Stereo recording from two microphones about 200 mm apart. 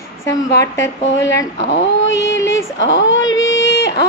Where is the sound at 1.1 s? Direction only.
65° left (ahead or behind).